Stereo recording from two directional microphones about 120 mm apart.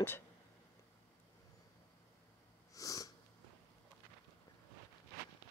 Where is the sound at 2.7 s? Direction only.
30° left (ahead or behind).